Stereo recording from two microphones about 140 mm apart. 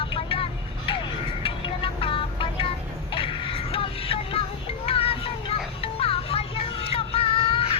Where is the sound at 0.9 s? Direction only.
40° left (ahead or behind).